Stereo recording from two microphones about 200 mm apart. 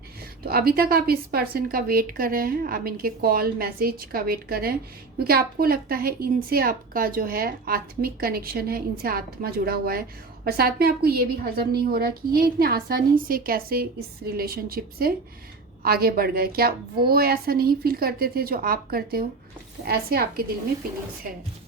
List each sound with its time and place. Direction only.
0.4 s a woman's voice: 50° right (ahead or behind)